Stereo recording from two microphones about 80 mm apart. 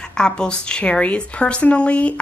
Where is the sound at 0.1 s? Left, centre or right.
Centre.